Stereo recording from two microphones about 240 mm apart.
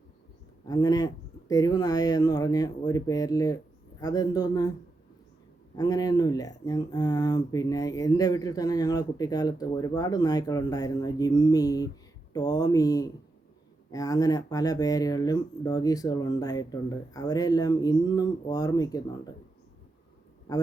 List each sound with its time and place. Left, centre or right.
0.7 s speech: centre
5.7 s speech: centre
20.5 s a man's voice: centre